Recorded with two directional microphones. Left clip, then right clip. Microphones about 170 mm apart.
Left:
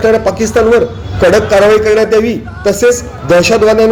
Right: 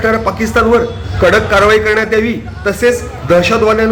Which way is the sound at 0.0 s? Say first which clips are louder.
Left 4 dB; 20° left (ahead or behind).